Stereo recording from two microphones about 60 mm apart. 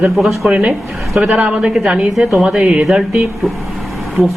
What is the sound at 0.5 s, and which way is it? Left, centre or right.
A man's voice, centre.